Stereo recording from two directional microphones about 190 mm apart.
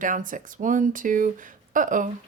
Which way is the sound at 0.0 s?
45° right (ahead or behind).